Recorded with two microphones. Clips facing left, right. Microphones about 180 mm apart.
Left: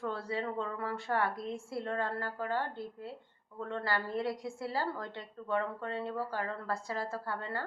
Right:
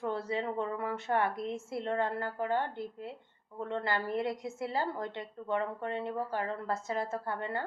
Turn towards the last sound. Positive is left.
turn(degrees=-20)  # may be behind; listen again after turning